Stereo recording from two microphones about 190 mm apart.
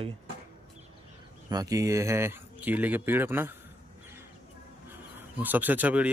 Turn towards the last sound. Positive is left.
turn(degrees=-10)  # may be behind; listen again after turning